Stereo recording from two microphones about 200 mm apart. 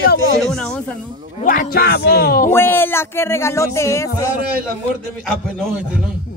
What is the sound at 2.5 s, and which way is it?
Speech, 10° left (ahead or behind).